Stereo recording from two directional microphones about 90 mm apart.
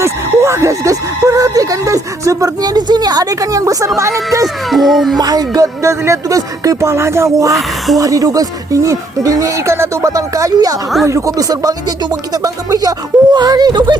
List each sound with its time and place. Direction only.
0.0 s speech: 30° right (ahead or behind)
4.7 s speech: centre (ahead or behind)
5.1 s speech: 45° right (ahead or behind)